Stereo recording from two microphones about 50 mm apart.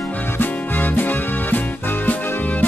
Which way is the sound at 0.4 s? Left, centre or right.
Left.